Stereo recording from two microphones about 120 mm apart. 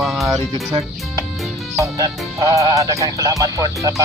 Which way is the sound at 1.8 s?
30° right (ahead or behind).